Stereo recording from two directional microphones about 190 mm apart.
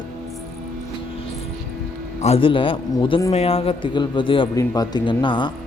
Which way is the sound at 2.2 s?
30° left (ahead or behind).